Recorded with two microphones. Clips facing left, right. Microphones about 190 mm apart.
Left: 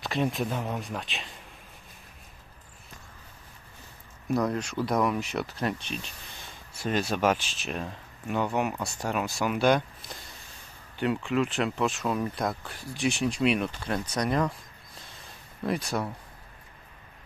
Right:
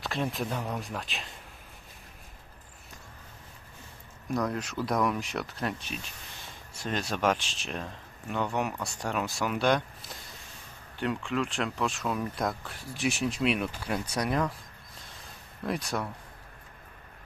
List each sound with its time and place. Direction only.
0.0 s speech: centre (ahead or behind)
4.3 s speech: centre (ahead or behind)
15.6 s speech: centre (ahead or behind)